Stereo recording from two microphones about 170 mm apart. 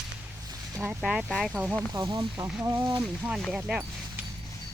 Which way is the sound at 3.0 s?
Centre (ahead or behind).